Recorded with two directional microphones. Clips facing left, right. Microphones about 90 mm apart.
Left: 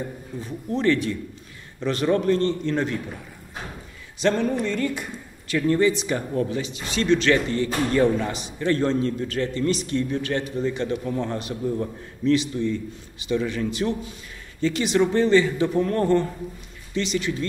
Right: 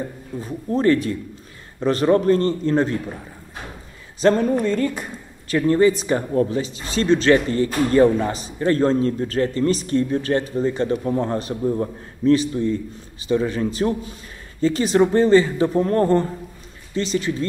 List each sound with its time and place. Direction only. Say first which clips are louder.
0.4 s speech: right 5 dB; 40° right (ahead or behind)
4.2 s speech: right 5 dB; 40° right (ahead or behind)